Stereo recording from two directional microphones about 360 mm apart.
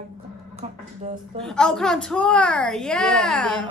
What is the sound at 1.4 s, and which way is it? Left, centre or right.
A woman's voice, centre.